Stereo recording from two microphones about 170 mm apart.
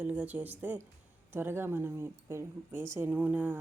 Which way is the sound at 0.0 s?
10° right (ahead or behind).